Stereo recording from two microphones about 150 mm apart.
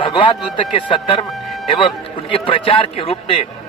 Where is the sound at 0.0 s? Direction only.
35° left (ahead or behind).